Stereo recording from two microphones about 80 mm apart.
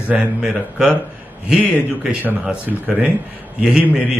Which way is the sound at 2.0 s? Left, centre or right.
Centre.